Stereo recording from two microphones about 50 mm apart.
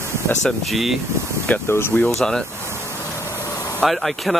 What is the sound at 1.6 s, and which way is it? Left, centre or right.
Speech, left.